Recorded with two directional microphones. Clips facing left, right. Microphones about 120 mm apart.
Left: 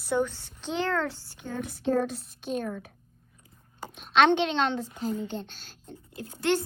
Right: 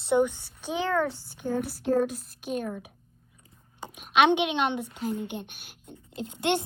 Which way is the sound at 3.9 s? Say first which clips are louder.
Even; 10° right (ahead or behind).